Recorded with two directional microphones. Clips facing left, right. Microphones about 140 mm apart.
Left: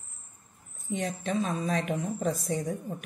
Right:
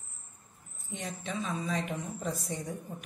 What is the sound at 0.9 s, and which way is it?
Speech, 60° left (ahead or behind).